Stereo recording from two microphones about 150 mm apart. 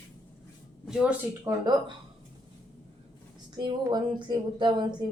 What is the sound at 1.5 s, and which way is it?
Speech, 20° right (ahead or behind).